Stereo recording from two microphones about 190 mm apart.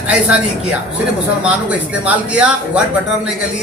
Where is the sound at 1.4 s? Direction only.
5° right (ahead or behind).